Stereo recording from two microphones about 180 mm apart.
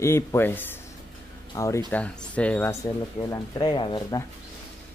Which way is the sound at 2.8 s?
20° left (ahead or behind).